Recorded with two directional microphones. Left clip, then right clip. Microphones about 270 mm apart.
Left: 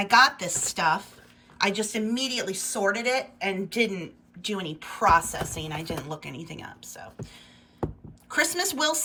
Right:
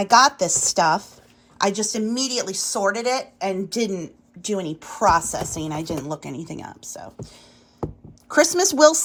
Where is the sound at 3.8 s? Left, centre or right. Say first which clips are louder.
Right 3 dB; right.